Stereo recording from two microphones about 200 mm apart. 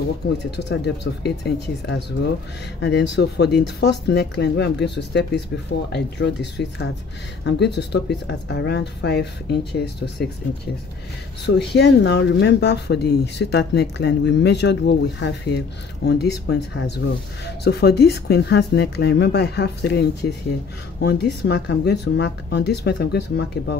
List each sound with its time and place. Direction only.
0.7 s speech: 55° left (ahead or behind)
11.4 s speech: 55° left (ahead or behind)